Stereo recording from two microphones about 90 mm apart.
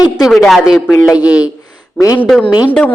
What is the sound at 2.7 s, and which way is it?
Speech, 20° left (ahead or behind).